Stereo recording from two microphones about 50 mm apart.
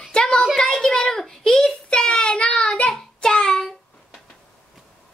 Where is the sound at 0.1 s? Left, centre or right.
Centre.